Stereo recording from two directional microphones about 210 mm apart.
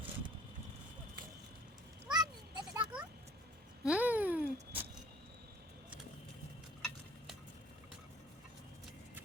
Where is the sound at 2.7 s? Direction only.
5° right (ahead or behind).